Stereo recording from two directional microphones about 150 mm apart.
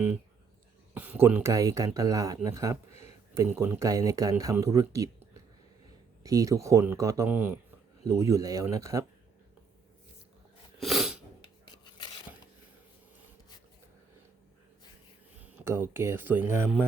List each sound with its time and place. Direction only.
0.9 s speech: 10° right (ahead or behind)
2.9 s a sound: 50° left (ahead or behind)
3.5 s speech: 15° right (ahead or behind)
10.8 s sneeze: centre (ahead or behind)
11.4 s filing: 30° left (ahead or behind)
15.6 s speech: 15° right (ahead or behind)